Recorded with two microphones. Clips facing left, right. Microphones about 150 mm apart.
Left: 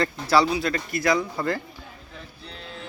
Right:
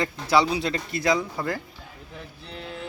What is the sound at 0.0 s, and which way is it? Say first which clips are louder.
Speech: left 1 dB; 15° right (ahead or behind).